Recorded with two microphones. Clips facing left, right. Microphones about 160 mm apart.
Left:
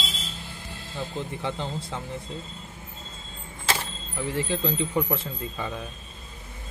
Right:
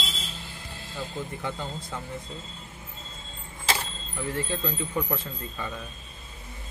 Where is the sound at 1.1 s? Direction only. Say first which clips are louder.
Left 3 dB; 20° left (ahead or behind).